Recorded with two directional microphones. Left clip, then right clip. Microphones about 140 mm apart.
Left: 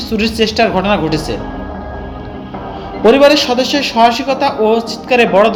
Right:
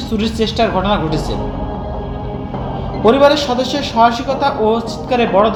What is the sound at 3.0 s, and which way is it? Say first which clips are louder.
A man's voice: left 3 dB; 50° left (ahead or behind).